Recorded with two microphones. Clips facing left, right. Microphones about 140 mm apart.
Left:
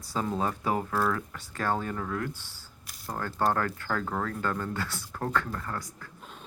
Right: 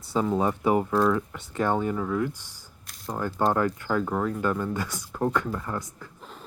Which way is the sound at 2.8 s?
Centre (ahead or behind).